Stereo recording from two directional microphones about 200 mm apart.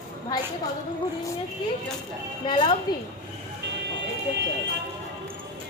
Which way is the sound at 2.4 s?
25° left (ahead or behind).